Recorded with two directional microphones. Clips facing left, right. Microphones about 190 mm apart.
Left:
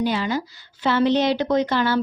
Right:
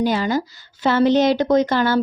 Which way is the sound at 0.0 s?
45° right (ahead or behind).